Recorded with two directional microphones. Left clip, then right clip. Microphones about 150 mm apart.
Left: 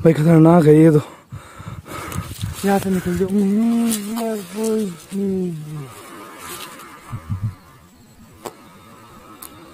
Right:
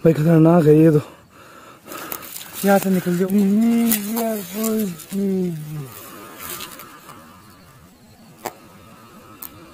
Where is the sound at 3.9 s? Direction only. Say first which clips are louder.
Right 1 dB; 40° right (ahead or behind).